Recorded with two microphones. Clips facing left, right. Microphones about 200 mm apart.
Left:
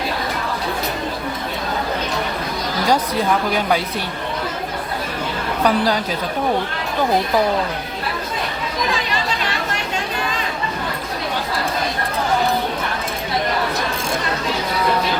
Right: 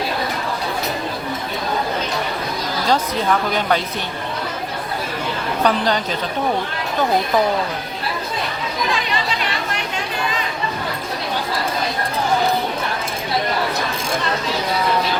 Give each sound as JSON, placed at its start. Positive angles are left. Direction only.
{"t": 5.6, "sound": "a woman's voice", "side_deg": 10}